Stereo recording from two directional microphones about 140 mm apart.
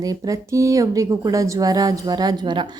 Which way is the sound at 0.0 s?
25° right (ahead or behind).